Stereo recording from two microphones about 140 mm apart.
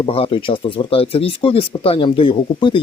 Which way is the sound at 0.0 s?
40° left (ahead or behind).